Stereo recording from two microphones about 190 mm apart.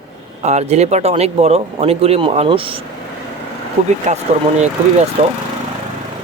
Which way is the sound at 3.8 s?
35° right (ahead or behind).